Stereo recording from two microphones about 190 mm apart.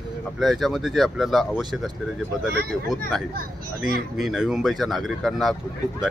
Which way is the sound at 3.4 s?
50° right (ahead or behind).